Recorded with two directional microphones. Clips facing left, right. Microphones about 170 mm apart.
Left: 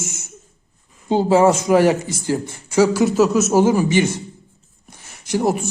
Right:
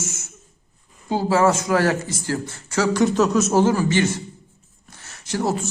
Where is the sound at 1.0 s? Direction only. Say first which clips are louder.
Left 4 dB; 20° left (ahead or behind).